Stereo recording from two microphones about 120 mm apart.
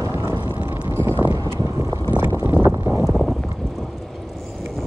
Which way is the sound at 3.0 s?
Centre (ahead or behind).